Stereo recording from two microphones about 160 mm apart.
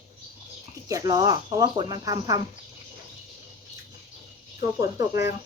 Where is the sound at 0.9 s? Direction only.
20° right (ahead or behind).